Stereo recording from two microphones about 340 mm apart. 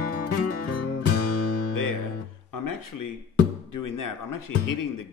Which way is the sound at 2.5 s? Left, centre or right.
Left.